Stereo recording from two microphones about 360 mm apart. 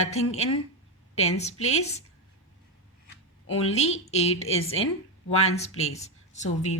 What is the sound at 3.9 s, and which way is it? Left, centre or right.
Speech, centre.